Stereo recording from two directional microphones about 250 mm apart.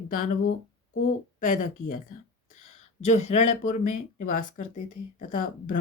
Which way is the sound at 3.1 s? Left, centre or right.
Left.